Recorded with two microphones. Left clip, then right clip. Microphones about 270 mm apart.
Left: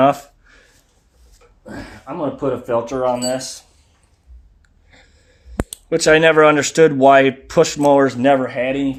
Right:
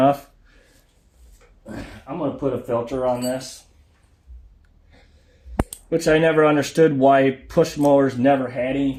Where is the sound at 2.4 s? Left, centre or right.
Left.